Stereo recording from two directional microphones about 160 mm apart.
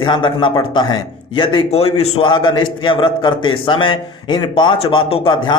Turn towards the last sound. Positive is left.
turn(degrees=30)  # may be behind; listen again after turning